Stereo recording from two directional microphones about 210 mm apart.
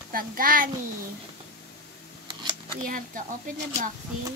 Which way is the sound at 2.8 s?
40° right (ahead or behind).